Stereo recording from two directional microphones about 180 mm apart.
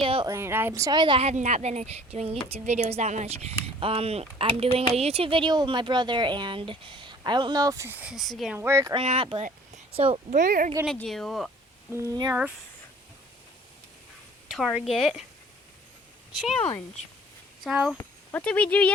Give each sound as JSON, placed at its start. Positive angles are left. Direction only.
{"t": 0.0, "sound": "a sound", "side_deg": -30}
{"t": 0.3, "sound": "speech", "side_deg": -15}
{"t": 8.5, "sound": "speech", "side_deg": -15}
{"t": 9.0, "sound": "speech", "side_deg": -30}
{"t": 9.4, "sound": "a sound", "side_deg": -35}
{"t": 10.3, "sound": "speech", "side_deg": -50}
{"t": 10.8, "sound": "speech", "side_deg": 5}
{"t": 11.9, "sound": "speech", "side_deg": -20}
{"t": 14.5, "sound": "speech", "side_deg": 0}
{"t": 17.6, "sound": "speech", "side_deg": 0}
{"t": 17.9, "sound": "speech", "side_deg": 10}